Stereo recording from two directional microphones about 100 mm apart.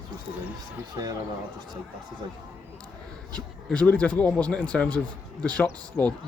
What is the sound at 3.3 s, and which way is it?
Speech, 10° left (ahead or behind).